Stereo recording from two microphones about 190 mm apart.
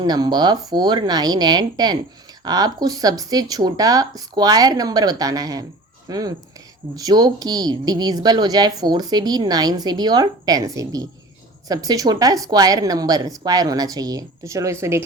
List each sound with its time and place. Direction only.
0.0 s speech: 20° right (ahead or behind)